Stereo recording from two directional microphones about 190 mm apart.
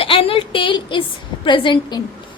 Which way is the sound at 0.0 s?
30° left (ahead or behind).